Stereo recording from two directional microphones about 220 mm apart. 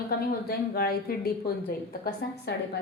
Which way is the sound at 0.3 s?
45° left (ahead or behind).